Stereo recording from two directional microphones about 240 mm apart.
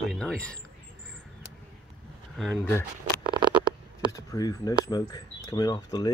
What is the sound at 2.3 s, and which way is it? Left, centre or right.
Speech, centre.